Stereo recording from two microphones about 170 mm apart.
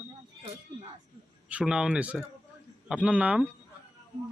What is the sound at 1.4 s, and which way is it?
Speech, 5° right (ahead or behind).